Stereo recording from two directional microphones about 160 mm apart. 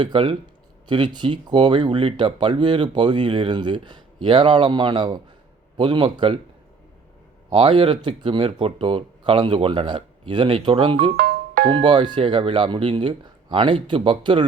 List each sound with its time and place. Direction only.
0.0 s speech: 30° right (ahead or behind)
7.5 s speech: 30° right (ahead or behind)
11.1 s music: 70° right (ahead or behind)
11.7 s speech: 30° right (ahead or behind)